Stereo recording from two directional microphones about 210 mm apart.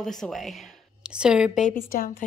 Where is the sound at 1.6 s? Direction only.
45° left (ahead or behind).